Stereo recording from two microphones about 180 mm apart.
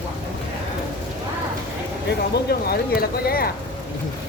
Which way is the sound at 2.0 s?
60° left (ahead or behind).